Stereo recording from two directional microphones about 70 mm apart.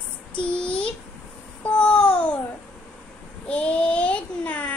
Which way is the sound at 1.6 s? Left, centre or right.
Centre.